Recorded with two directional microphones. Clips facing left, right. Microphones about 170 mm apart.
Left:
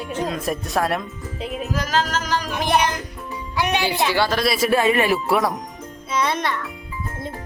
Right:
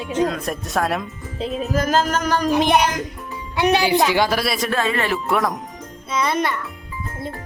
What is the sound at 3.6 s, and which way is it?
Speech, 35° right (ahead or behind).